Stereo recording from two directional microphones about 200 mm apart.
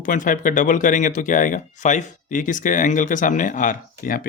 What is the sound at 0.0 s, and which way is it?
Speech, 40° left (ahead or behind).